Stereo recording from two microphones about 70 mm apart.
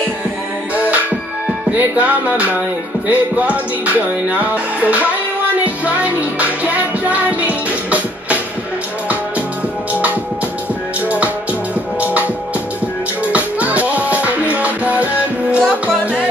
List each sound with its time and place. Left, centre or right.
0.7 s music: right
12.0 s music: right
13.3 s music: right